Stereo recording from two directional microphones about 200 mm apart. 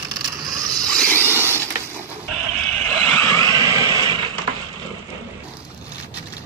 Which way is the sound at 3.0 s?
10° left (ahead or behind).